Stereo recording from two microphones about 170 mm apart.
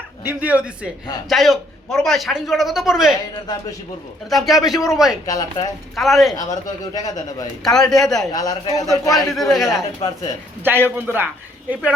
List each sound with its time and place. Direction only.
0.3 s a man's voice: 10° right (ahead or behind)
4.3 s a man's voice: centre (ahead or behind)
5.2 s a man's voice: 20° left (ahead or behind)
6.0 s a man's voice: centre (ahead or behind)
6.3 s a man's voice: 20° left (ahead or behind)
7.6 s a man's voice: centre (ahead or behind)
8.3 s a man's voice: 25° left (ahead or behind)
9.3 s a man's voice: centre (ahead or behind)
10.0 s speech: 35° left (ahead or behind)
10.6 s a man's voice: 15° right (ahead or behind)